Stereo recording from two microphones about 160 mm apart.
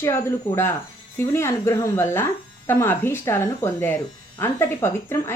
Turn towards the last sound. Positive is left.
turn(degrees=15)  # may be behind; listen again after turning